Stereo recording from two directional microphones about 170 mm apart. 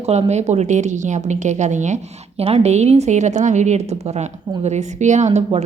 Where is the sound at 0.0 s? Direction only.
40° right (ahead or behind).